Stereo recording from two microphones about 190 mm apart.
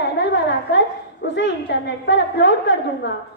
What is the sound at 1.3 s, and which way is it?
A woman's voice, 65° left (ahead or behind).